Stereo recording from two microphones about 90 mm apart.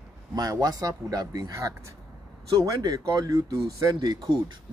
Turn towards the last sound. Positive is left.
turn(degrees=-40)  # may be behind; listen again after turning